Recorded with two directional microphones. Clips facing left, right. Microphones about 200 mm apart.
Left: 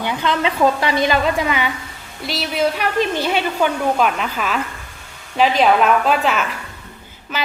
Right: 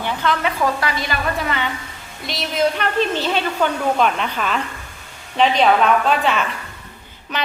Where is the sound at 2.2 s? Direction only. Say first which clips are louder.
Even; centre (ahead or behind).